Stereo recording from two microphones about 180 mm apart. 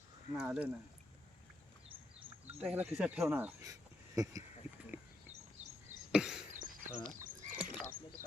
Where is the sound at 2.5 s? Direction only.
5° right (ahead or behind).